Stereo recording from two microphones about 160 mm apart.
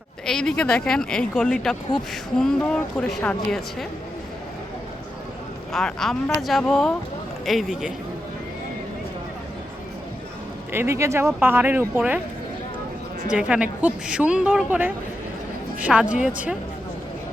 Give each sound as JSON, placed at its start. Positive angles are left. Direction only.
{"t": 0.3, "sound": "a woman's voice", "side_deg": 5}
{"t": 5.7, "sound": "a woman's voice", "side_deg": 5}
{"t": 10.7, "sound": "speech", "side_deg": -15}
{"t": 13.3, "sound": "speech", "side_deg": -5}